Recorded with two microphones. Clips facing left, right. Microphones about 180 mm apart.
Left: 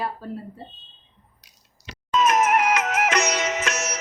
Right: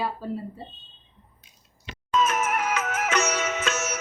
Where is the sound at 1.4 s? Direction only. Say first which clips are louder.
Right 2 dB; 80° left.